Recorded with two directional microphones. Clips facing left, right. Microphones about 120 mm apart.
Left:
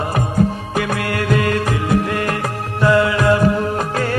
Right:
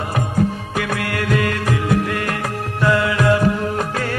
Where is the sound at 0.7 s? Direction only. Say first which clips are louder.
Left 3 dB; 30° left (ahead or behind).